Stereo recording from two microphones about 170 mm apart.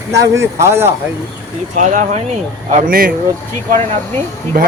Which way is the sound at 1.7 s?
45° right (ahead or behind).